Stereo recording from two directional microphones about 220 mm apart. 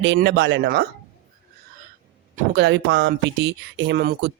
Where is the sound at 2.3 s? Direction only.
40° right (ahead or behind).